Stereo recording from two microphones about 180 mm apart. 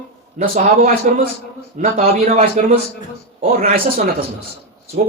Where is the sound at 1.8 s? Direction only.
45° right (ahead or behind).